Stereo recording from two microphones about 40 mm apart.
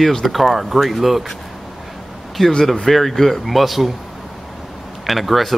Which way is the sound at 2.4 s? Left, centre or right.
Centre.